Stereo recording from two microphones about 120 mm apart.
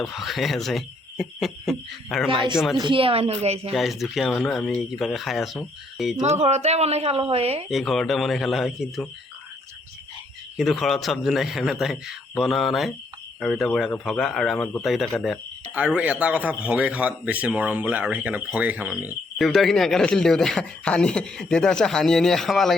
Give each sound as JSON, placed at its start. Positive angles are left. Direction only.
{"t": 0.0, "sound": "speech", "side_deg": 0}
{"t": 2.3, "sound": "speech", "side_deg": -45}
{"t": 3.7, "sound": "speech", "side_deg": 0}
{"t": 6.2, "sound": "speech", "side_deg": -65}
{"t": 7.7, "sound": "speech", "side_deg": 0}
{"t": 10.6, "sound": "speech", "side_deg": 0}
{"t": 15.7, "sound": "a man's voice", "side_deg": -10}
{"t": 19.4, "sound": "speech", "side_deg": 0}